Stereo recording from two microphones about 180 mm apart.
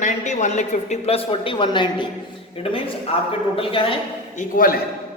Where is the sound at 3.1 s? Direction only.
30° left (ahead or behind).